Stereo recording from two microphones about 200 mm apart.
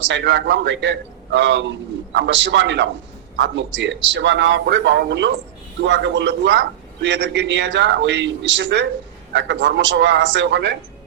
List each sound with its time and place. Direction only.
0.1 s a man's voice: 65° right (ahead or behind)